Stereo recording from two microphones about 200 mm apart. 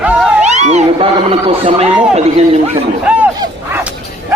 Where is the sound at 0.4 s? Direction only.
35° right (ahead or behind).